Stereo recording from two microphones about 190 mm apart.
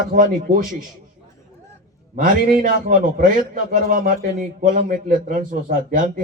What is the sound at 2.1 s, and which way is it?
Speech, 50° right (ahead or behind).